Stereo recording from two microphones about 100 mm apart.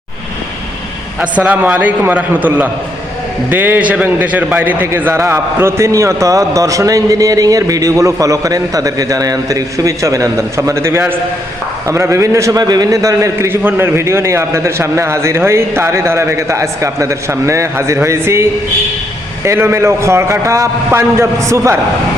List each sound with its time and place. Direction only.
1.2 s a man's voice: 15° right (ahead or behind)
19.5 s a man's voice: 30° right (ahead or behind)